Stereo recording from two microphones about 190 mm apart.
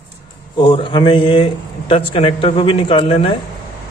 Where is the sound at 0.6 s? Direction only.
25° left (ahead or behind).